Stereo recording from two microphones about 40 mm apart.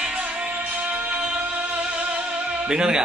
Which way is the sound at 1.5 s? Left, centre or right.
Right.